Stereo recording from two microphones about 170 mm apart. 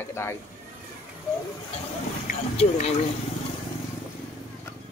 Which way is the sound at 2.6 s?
35° left (ahead or behind).